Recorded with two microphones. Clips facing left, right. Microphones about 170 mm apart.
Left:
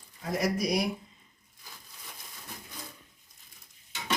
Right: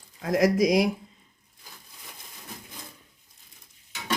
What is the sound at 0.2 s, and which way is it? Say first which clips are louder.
Speech: right 8 dB; 90° right.